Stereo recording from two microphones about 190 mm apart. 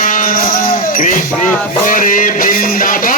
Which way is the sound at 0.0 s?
45° left (ahead or behind).